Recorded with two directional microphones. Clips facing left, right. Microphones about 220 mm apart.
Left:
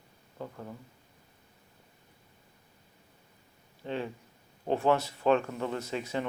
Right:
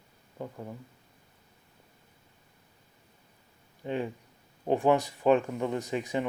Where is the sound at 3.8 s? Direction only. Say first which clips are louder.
Right 3 dB; 15° right (ahead or behind).